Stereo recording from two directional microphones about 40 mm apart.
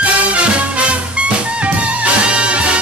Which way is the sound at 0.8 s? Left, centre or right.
Right.